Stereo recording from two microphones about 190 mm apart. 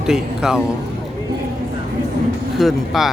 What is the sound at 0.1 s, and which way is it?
Speech, 5° right (ahead or behind).